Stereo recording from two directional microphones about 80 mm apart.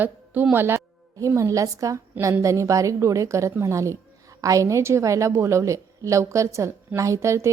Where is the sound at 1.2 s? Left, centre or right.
Right.